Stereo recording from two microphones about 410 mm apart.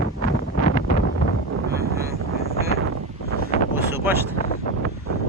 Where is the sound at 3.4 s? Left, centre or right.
Centre.